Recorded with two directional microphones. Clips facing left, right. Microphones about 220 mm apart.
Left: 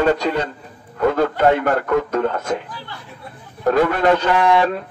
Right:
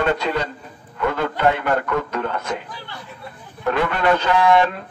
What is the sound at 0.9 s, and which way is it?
A man's voice, 45° left (ahead or behind).